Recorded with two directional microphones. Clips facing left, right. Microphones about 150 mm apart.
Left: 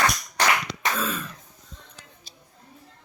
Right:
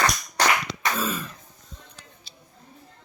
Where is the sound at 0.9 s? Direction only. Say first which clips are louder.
Right 1 dB; 5° right (ahead or behind).